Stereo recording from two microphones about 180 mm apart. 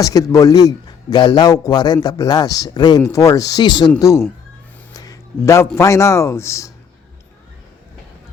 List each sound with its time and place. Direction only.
0.0 s a man's voice: 20° left (ahead or behind)